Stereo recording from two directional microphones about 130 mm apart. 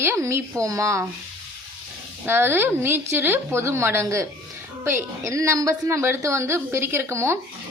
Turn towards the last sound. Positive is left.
turn(degrees=-20)  # may be behind; listen again after turning